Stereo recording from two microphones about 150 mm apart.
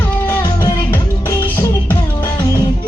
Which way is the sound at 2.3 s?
25° left (ahead or behind).